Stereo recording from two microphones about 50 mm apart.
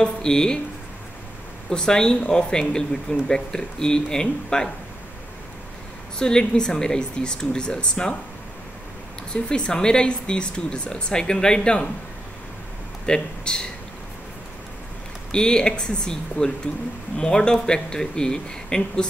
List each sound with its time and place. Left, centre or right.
0.0 s speech: centre
1.7 s speech: centre
6.1 s speech: centre
9.3 s speech: centre
13.0 s speech: centre
15.3 s speech: centre